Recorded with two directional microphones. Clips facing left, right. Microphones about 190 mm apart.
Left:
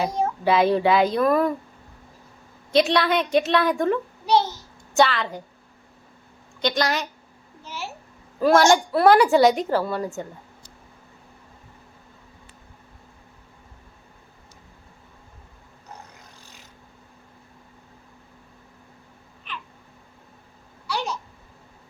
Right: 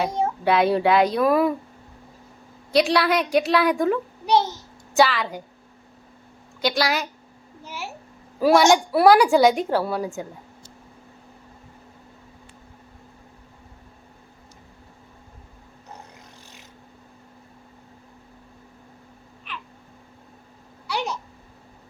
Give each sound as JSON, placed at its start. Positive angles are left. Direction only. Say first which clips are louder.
{"t": 0.4, "sound": "a woman's voice", "louder": "even", "side_deg": 0}
{"t": 2.7, "sound": "a woman's voice", "louder": "even", "side_deg": 0}
{"t": 4.3, "sound": "a child's voice", "louder": "even", "side_deg": -20}
{"t": 4.9, "sound": "a woman's voice", "louder": "right 1 dB", "side_deg": 0}
{"t": 6.6, "sound": "a woman's voice", "louder": "right 1 dB", "side_deg": -5}
{"t": 8.4, "sound": "a woman's voice", "louder": "right 1 dB", "side_deg": -5}
{"t": 20.8, "sound": "a sound", "louder": "right 1 dB", "side_deg": -20}